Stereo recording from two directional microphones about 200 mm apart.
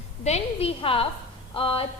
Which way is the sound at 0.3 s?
30° left (ahead or behind).